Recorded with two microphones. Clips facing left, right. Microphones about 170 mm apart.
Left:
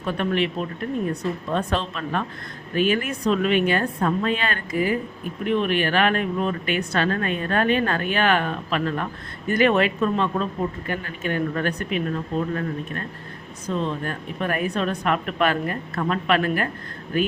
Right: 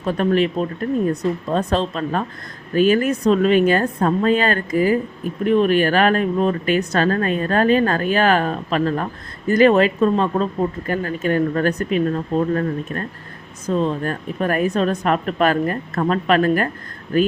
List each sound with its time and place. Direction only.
0.0 s speech: 35° right (ahead or behind)